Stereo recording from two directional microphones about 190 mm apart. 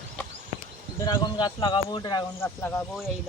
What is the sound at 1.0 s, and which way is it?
Speech, 20° left (ahead or behind).